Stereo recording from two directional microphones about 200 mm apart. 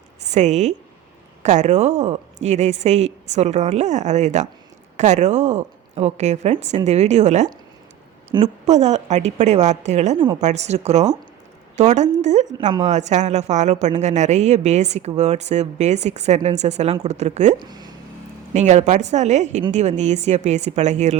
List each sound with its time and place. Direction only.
0.3 s a woman's voice: 35° right (ahead or behind)
8.6 s a woman's voice: 35° right (ahead or behind)
17.6 s speech: 20° right (ahead or behind)
18.5 s a woman's voice: 35° right (ahead or behind)